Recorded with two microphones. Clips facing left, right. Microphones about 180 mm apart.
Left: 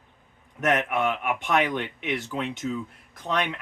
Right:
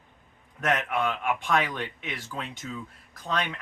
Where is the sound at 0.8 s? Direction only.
20° left (ahead or behind).